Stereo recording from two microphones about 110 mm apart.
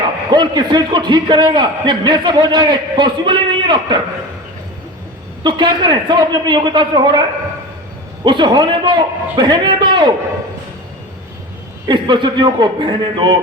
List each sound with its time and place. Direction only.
0.3 s a man's voice: 45° right (ahead or behind)
5.4 s a man's voice: 45° right (ahead or behind)
8.2 s a man's voice: 45° right (ahead or behind)
11.9 s a man's voice: 45° right (ahead or behind)